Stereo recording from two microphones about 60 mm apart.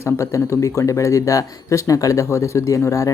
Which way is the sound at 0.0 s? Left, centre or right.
Left.